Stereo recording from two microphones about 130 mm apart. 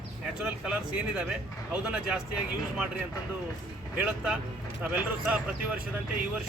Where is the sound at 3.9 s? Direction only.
10° right (ahead or behind).